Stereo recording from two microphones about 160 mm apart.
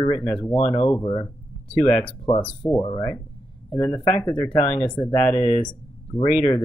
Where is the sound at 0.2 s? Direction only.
5° left (ahead or behind).